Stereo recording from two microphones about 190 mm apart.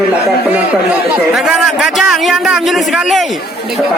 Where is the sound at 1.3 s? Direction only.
5° right (ahead or behind).